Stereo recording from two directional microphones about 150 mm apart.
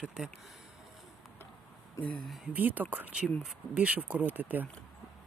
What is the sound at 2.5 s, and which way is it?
Speech, 10° right (ahead or behind).